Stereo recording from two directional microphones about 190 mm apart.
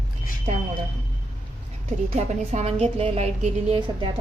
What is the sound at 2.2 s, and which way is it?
A woman's voice, 35° right (ahead or behind).